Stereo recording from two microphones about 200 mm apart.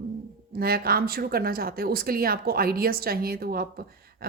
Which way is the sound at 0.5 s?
50° right (ahead or behind).